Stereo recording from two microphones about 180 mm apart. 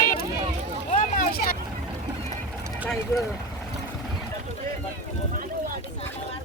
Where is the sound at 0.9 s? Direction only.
50° left (ahead or behind).